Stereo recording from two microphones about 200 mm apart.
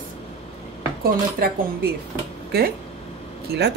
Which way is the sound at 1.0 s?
50° right (ahead or behind).